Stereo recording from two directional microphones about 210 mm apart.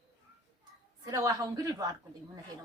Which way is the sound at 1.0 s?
15° right (ahead or behind).